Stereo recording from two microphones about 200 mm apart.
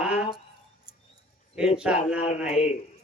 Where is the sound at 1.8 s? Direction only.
5° right (ahead or behind).